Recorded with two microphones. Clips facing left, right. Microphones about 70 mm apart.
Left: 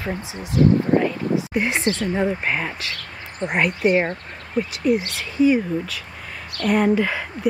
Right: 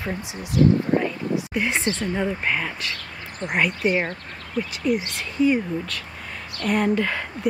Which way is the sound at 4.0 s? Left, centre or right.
Centre.